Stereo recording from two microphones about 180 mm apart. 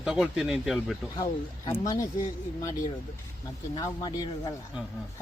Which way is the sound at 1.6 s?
20° left (ahead or behind).